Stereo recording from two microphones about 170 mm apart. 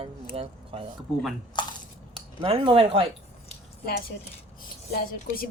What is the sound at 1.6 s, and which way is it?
Coin, 25° left (ahead or behind).